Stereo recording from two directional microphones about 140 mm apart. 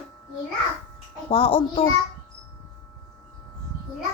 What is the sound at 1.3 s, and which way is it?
Speech, 40° left (ahead or behind).